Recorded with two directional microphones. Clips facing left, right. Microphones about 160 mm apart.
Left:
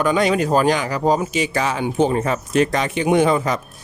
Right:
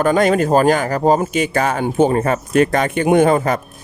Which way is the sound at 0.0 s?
50° right (ahead or behind).